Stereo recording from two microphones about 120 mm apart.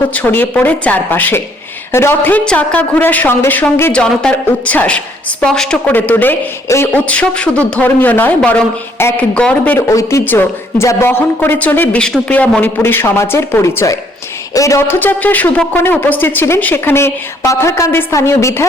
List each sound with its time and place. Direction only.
0.1 s a woman's voice: 15° left (ahead or behind)
9.7 s speech: 25° left (ahead or behind)